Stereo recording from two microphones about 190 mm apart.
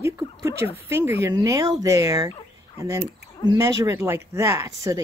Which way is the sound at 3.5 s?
15° right (ahead or behind).